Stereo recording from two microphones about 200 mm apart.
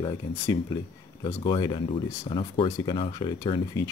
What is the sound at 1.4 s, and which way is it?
Speech, 25° left (ahead or behind).